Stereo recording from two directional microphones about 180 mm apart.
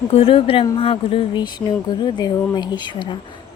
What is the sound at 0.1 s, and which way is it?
A woman's voice, 30° left (ahead or behind).